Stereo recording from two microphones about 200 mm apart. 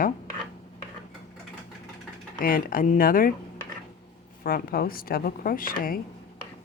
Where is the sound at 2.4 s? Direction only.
45° left (ahead or behind).